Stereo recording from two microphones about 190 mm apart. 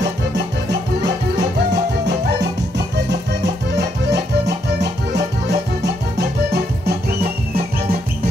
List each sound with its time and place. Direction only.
0.0 s music: 65° right (ahead or behind)
3.7 s music: 60° right (ahead or behind)